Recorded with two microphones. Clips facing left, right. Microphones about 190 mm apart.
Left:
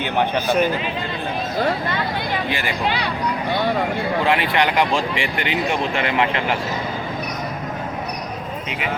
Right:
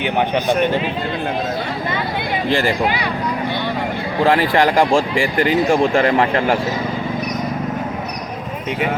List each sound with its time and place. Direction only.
4.3 s speech: 40° right (ahead or behind)